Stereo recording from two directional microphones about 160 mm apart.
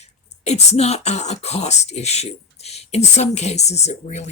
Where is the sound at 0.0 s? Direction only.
45° left (ahead or behind).